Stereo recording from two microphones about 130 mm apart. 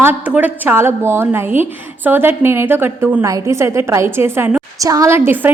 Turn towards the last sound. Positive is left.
turn(degrees=-15)  # may be behind; listen again after turning